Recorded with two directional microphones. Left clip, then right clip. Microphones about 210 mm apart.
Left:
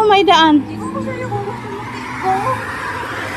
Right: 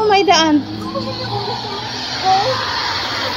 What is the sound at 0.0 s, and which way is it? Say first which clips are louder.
Speech: left 2 dB; 15° left (ahead or behind).